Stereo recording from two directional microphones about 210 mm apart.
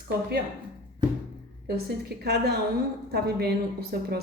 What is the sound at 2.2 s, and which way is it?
A woman's voice, 50° right (ahead or behind).